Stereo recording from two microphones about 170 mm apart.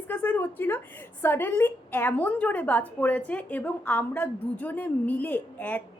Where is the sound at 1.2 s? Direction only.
15° left (ahead or behind).